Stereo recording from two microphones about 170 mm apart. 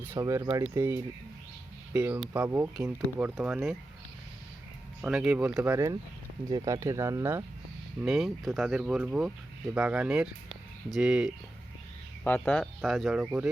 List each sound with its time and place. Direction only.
0.0 s speech: 15° right (ahead or behind)
5.0 s speech: 5° right (ahead or behind)
5.7 s speech: 20° right (ahead or behind)
8.0 s speech: centre (ahead or behind)
12.2 s speech: 10° left (ahead or behind); by 13.5 s 5° right (ahead or behind)